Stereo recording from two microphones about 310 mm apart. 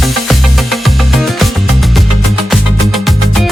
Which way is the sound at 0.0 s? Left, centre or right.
Centre.